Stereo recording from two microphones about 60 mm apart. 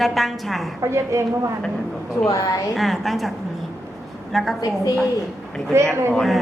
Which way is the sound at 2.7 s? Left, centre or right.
Centre.